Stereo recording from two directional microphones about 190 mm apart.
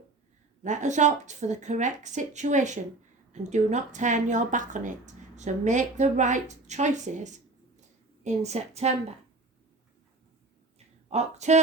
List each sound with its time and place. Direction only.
0.6 s a woman's voice: 40° right (ahead or behind)
11.1 s a woman's voice: 35° right (ahead or behind)